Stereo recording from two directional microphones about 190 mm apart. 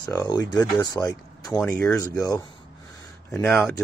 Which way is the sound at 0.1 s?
20° left (ahead or behind).